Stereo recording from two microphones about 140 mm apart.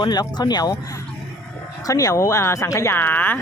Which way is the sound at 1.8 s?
25° left (ahead or behind).